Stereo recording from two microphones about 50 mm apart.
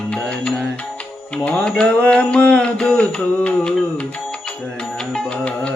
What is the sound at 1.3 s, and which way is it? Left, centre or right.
Speech, left.